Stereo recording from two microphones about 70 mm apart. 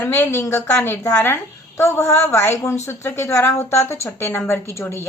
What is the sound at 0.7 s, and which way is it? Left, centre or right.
Speech, left.